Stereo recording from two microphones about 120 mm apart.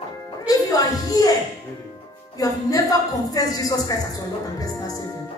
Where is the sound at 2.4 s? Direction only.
30° left (ahead or behind).